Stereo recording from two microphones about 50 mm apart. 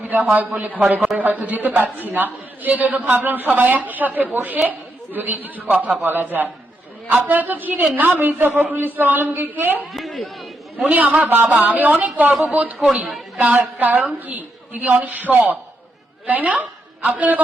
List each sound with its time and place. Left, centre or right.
0.3 s a woman's voice: right
9.9 s chatter: centre
10.8 s a woman's voice: right